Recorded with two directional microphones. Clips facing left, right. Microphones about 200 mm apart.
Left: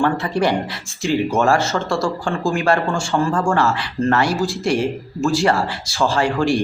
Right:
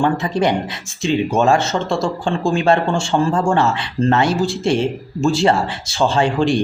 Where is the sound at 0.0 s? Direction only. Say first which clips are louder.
Right 1 dB; 20° right (ahead or behind).